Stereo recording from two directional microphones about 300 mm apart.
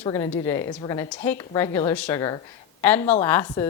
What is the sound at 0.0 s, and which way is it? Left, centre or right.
A woman's voice, centre.